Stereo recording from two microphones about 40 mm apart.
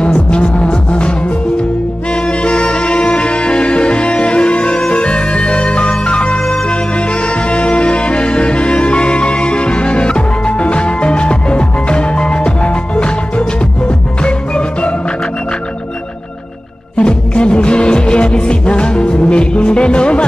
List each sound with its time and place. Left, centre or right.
0.0 s music: left
2.2 s music: left
16.9 s music: left